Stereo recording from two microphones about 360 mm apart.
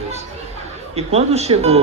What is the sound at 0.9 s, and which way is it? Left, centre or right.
Speech, centre.